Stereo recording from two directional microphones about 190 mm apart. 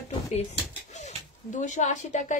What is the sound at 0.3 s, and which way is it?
Speech, 35° left (ahead or behind).